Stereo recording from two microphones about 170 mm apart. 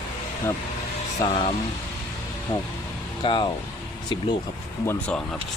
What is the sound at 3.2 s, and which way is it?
Speech, 30° left (ahead or behind).